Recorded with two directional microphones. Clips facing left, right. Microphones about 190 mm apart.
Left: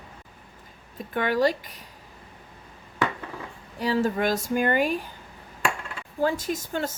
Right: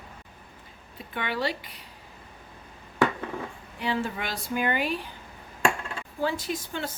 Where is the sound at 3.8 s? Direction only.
40° left (ahead or behind).